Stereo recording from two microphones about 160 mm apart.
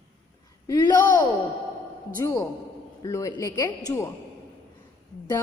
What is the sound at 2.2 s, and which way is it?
Mantra, 25° left (ahead or behind).